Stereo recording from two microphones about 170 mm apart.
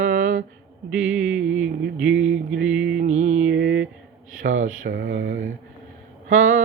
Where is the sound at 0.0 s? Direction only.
50° right (ahead or behind).